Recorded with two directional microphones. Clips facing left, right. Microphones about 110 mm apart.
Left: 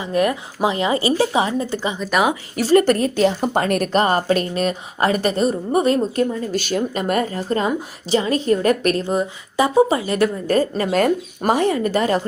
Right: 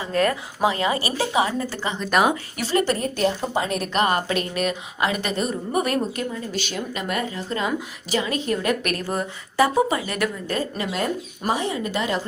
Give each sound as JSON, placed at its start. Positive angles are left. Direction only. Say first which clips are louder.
{"t": 0.0, "sound": "a woman's voice", "louder": "left 3 dB", "side_deg": 15}
{"t": 2.0, "sound": "speech", "louder": "even", "side_deg": 5}
{"t": 2.6, "sound": "a woman's voice", "louder": "left 10 dB", "side_deg": 40}
{"t": 2.8, "sound": "a woman's voice", "louder": "left 6 dB", "side_deg": 75}
{"t": 3.9, "sound": "a woman's voice", "louder": "left 3 dB", "side_deg": 35}
{"t": 6.5, "sound": "a woman's voice", "louder": "left 7 dB", "side_deg": 45}
{"t": 9.9, "sound": "a woman's voice", "louder": "left 6 dB", "side_deg": 30}
{"t": 10.4, "sound": "speech", "louder": "left 8 dB", "side_deg": 45}
{"t": 11.0, "sound": "speech", "louder": "left 7 dB", "side_deg": 55}